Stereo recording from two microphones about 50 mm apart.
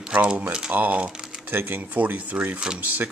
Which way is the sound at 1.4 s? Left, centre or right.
Right.